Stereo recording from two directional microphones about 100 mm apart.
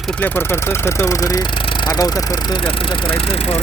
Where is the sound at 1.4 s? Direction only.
60° left (ahead or behind).